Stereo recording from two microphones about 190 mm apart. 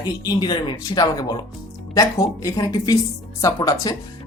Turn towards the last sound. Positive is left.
turn(degrees=20)  # may be behind; listen again after turning